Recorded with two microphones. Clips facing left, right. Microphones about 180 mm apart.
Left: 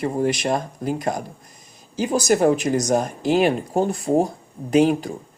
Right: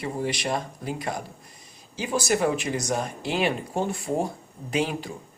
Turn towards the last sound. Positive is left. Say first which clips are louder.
# left 10 dB
turn(degrees=45)  # may be behind; listen again after turning